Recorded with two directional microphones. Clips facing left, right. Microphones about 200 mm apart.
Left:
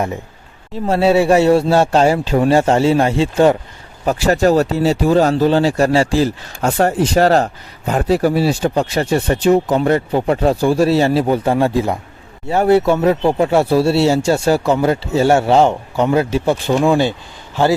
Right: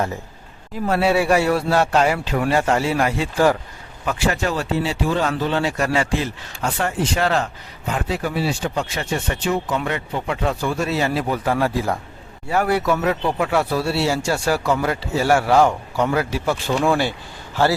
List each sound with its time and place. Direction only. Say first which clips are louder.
0.7 s speech: left 5 dB; 25° left (ahead or behind)
4.0 s speech: left 8 dB; 40° left (ahead or behind); by 17.2 s 20° left (ahead or behind)